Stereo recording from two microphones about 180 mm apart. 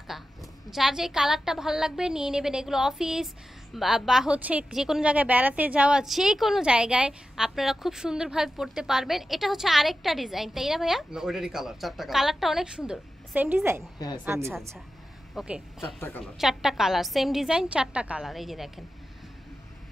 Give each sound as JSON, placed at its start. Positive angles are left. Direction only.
{"t": 0.1, "sound": "speech", "side_deg": 0}
{"t": 13.9, "sound": "a woman's voice", "side_deg": 20}
{"t": 14.2, "sound": "a woman's voice", "side_deg": -15}
{"t": 15.3, "sound": "speech", "side_deg": -5}